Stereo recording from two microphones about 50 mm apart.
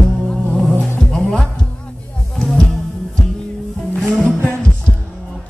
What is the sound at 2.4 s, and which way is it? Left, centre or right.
Music, centre.